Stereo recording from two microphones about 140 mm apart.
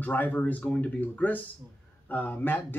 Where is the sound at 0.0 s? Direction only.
10° left (ahead or behind).